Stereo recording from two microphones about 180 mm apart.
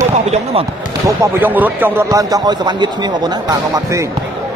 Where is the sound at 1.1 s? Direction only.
10° right (ahead or behind).